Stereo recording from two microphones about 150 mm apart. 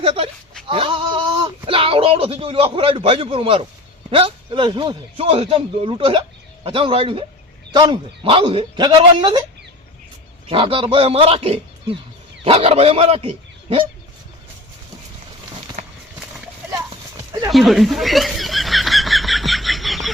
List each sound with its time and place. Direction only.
0.0 s speech: 40° right (ahead or behind)
10.5 s speech: 35° right (ahead or behind)
15.8 s clip-clop: 55° right (ahead or behind)
17.5 s a sound: centre (ahead or behind)